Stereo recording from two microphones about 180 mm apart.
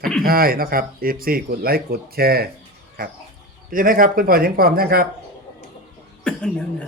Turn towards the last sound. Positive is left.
turn(degrees=5)  # may be behind; listen again after turning